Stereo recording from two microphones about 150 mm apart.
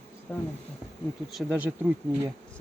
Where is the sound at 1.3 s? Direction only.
5° right (ahead or behind).